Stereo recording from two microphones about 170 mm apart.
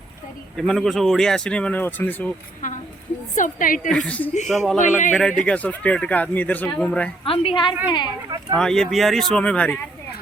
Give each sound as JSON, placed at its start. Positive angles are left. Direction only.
{"t": 0.5, "sound": "speech", "side_deg": 5}
{"t": 3.3, "sound": "a woman's voice", "side_deg": 50}
{"t": 3.8, "sound": "speech", "side_deg": 5}
{"t": 4.8, "sound": "a woman's voice", "side_deg": 45}
{"t": 5.1, "sound": "speech", "side_deg": 5}
{"t": 7.3, "sound": "a woman's voice", "side_deg": 30}
{"t": 8.5, "sound": "speech", "side_deg": 5}